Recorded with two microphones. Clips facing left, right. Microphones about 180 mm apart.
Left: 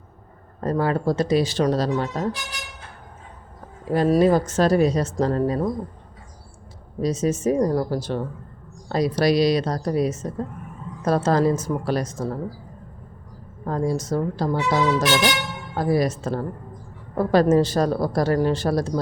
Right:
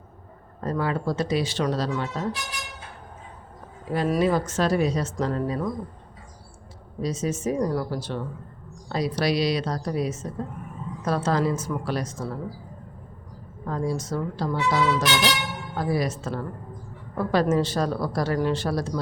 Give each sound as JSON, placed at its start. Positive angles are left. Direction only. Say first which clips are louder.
{"t": 0.6, "sound": "speech", "louder": "left 4 dB", "side_deg": 45}
{"t": 3.9, "sound": "speech", "louder": "left 5 dB", "side_deg": 40}
{"t": 7.0, "sound": "a woman's voice", "louder": "left 5 dB", "side_deg": 40}
{"t": 13.7, "sound": "a woman's voice", "louder": "left 4 dB", "side_deg": 45}